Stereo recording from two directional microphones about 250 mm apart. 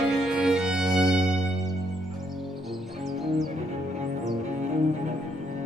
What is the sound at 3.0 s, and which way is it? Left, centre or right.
Music, centre.